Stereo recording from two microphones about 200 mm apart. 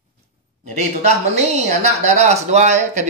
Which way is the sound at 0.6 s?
35° right (ahead or behind).